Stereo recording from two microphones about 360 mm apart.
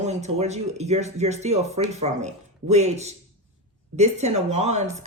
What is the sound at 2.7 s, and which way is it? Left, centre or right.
Speech, centre.